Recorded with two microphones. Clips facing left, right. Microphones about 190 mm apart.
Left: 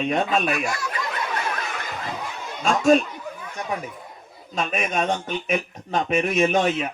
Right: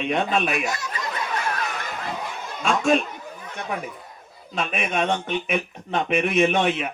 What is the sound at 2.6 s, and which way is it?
Speech, 40° left (ahead or behind).